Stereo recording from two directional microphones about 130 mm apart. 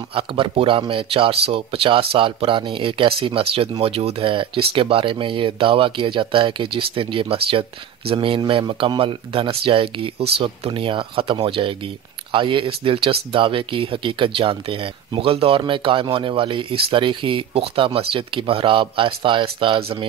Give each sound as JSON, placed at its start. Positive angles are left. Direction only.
{"t": 0.1, "sound": "speech", "side_deg": -45}